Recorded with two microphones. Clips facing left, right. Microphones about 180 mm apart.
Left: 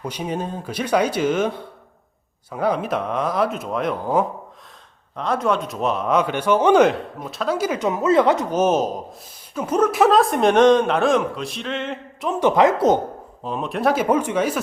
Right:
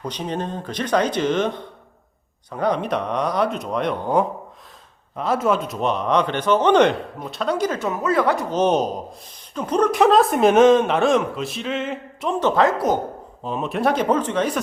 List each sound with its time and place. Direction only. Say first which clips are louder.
0.0 s a man's voice: even; 10° left (ahead or behind)
7.8 s speech: left 4 dB; 20° left (ahead or behind)
8.5 s a man's voice: even; 5° left (ahead or behind)
12.4 s speech: left 3 dB; 15° left (ahead or behind)
13.4 s a man's voice: even; centre (ahead or behind)